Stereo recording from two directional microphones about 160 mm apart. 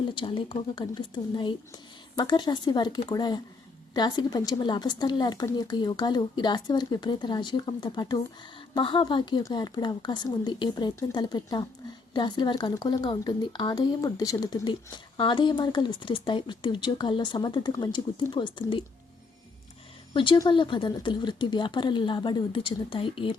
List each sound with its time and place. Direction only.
0.1 s speech: 30° left (ahead or behind)
20.1 s speech: 30° left (ahead or behind)